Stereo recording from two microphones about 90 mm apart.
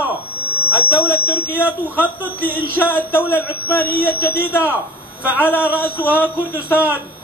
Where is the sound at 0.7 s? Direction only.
20° right (ahead or behind).